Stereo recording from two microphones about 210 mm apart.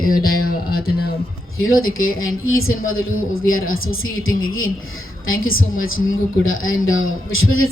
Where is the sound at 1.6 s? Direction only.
75° left (ahead or behind).